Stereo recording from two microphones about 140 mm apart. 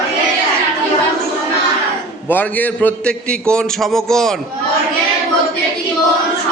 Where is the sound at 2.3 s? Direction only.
10° left (ahead or behind).